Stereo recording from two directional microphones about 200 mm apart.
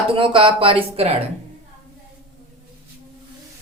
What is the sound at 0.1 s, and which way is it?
Speech, 25° right (ahead or behind).